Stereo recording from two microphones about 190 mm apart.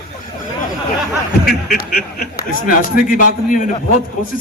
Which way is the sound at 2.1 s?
50° left (ahead or behind).